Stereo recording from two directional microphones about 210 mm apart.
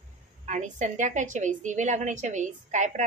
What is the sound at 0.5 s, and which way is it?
A woman's voice, 35° right (ahead or behind).